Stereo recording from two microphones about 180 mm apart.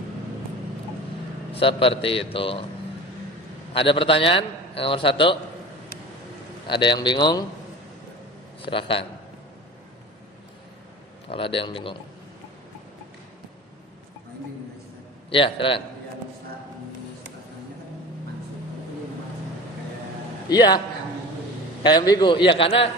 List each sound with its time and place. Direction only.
1.5 s a man's voice: 30° left (ahead or behind)
3.7 s a man's voice: 30° left (ahead or behind)
6.7 s a man's voice: 25° left (ahead or behind)
8.6 s a man's voice: 30° left (ahead or behind)
11.3 s a man's voice: 30° left (ahead or behind)
15.3 s a man's voice: 30° left (ahead or behind)
20.5 s a man's voice: 25° left (ahead or behind)
21.8 s a man's voice: 20° left (ahead or behind)